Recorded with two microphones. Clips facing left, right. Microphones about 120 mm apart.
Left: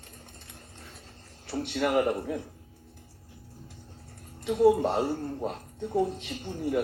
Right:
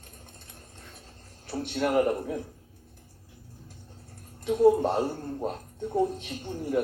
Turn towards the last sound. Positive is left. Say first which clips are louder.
# even
turn(degrees=-45)  # may be behind; listen again after turning